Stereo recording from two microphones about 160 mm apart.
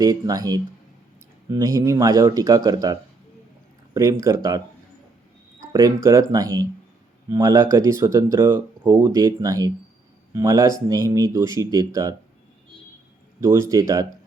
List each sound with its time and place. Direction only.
0.0 s speech: 20° right (ahead or behind)
5.7 s speech: 20° right (ahead or behind)
13.4 s speech: 20° right (ahead or behind)